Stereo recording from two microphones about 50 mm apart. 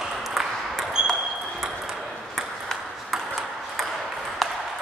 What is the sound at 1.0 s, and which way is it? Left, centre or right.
Ping, centre.